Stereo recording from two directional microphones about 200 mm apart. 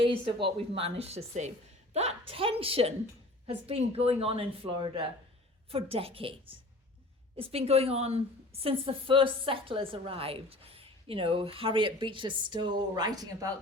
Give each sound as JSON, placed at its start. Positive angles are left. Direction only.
{"t": 0.0, "sound": "a woman's voice", "side_deg": -25}